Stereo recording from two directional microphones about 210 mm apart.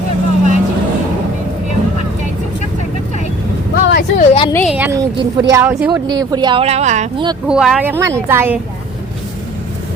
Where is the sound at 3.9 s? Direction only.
50° left (ahead or behind).